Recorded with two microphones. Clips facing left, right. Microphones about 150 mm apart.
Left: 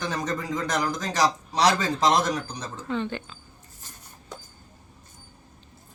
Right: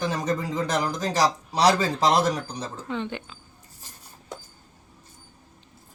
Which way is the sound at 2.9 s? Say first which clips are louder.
Left 3 dB; 15° right (ahead or behind).